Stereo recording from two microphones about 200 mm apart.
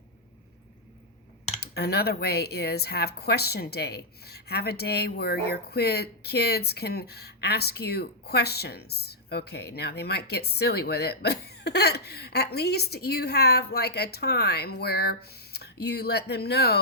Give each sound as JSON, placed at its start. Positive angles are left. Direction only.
{"t": 1.6, "sound": "speech", "side_deg": 55}